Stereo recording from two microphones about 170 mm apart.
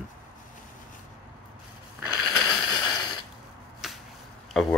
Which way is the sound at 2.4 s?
25° left (ahead or behind).